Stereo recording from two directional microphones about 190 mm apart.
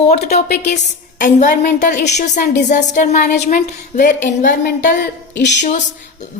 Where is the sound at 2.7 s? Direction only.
40° left (ahead or behind).